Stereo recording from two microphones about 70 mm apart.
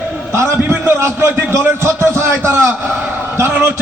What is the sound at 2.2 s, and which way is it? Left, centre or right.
Speech, right.